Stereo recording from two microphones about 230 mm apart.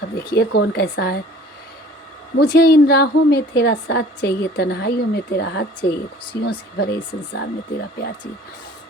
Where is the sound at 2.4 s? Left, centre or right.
Left.